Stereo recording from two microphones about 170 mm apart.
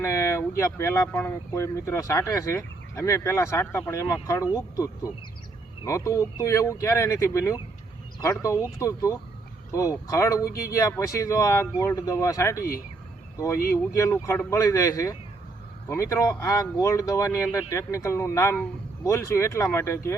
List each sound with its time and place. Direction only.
0.0 s speech: 15° left (ahead or behind)